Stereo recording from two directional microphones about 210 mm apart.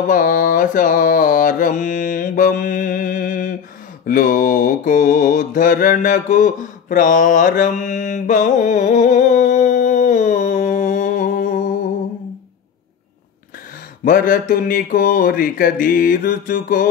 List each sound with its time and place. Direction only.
0.1 s mantra: 40° left (ahead or behind)
14.0 s mantra: 40° left (ahead or behind)